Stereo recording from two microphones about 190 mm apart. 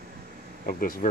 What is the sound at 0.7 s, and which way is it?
Speech, 50° left (ahead or behind).